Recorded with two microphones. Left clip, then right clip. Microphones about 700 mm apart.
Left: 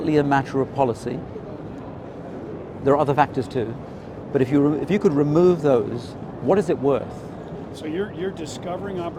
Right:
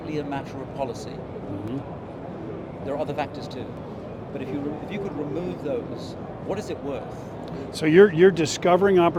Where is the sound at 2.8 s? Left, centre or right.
Left.